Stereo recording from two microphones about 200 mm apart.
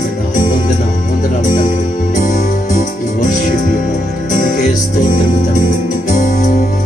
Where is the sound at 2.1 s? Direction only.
40° left (ahead or behind).